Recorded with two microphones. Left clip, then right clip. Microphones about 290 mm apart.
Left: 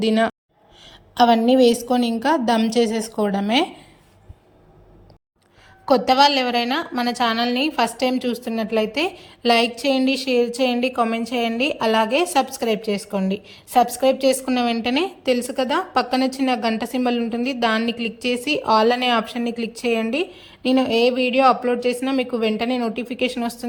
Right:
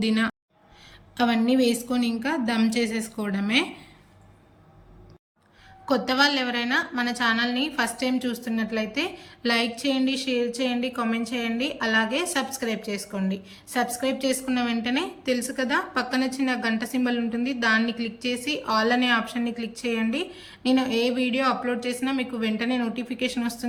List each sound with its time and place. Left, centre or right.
0.0 s a woman's voice: centre
5.8 s a woman's voice: left